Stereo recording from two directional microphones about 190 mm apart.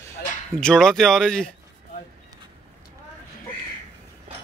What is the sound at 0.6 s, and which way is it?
Speech, 5° left (ahead or behind).